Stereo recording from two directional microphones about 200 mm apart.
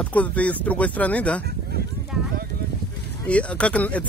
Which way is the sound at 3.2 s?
5° left (ahead or behind).